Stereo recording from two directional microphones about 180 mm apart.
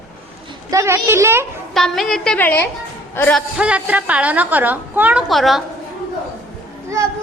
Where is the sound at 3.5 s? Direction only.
5° right (ahead or behind).